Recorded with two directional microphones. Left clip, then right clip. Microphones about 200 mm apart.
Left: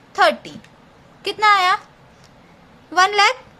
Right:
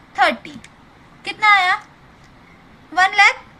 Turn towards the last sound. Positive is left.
turn(degrees=45)  # may be behind; listen again after turning